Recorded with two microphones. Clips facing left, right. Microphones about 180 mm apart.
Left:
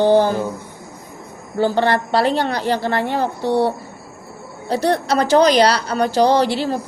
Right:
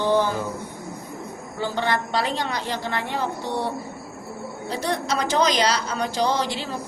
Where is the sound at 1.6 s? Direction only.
35° left (ahead or behind).